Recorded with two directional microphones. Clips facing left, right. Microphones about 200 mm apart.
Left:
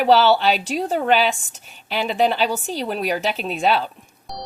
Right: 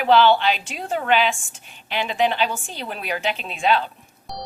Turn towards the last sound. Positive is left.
turn(degrees=0)  # may be behind; listen again after turning